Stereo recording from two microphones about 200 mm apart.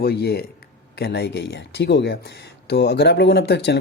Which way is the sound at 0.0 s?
55° left (ahead or behind).